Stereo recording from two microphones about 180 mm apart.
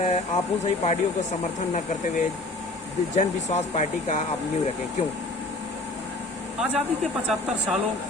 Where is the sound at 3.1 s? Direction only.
35° left (ahead or behind).